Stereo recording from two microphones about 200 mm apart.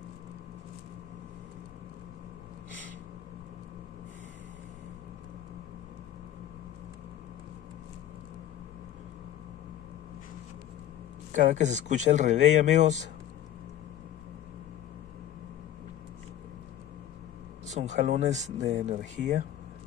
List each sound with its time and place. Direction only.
11.3 s speech: 40° right (ahead or behind)
17.7 s speech: 35° right (ahead or behind)